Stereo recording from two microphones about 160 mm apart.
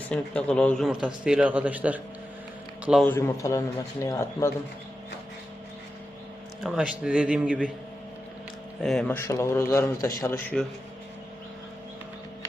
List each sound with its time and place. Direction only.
0.1 s a man's voice: 5° left (ahead or behind)
0.9 s a man's voice: 5° right (ahead or behind)
3.0 s a man's voice: 15° left (ahead or behind)
6.6 s a man's voice: 5° right (ahead or behind)
8.8 s a man's voice: centre (ahead or behind)
9.0 s a man's voice: 15° left (ahead or behind)